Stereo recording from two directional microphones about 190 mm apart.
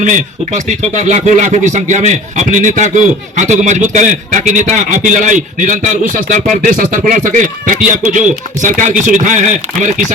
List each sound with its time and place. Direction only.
0.0 s speech: 40° right (ahead or behind)